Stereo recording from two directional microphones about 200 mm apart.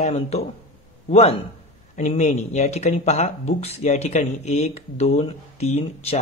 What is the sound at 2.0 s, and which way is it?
Speech, 35° left (ahead or behind).